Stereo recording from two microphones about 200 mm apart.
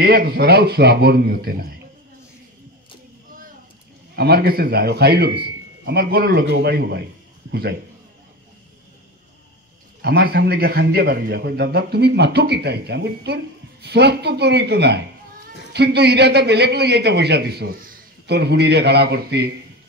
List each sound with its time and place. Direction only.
0.0 s speech: 50° right (ahead or behind)
4.1 s speech: 50° right (ahead or behind)
10.0 s a man's voice: 55° right (ahead or behind)